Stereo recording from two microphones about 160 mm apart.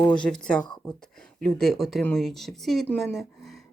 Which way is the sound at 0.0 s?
5° left (ahead or behind).